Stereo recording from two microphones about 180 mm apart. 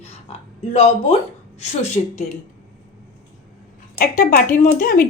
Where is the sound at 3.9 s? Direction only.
50° left (ahead or behind).